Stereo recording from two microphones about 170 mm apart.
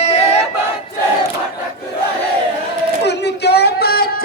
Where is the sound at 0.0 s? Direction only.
40° left (ahead or behind).